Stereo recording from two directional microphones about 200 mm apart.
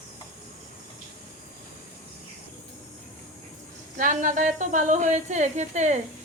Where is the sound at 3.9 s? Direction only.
40° right (ahead or behind).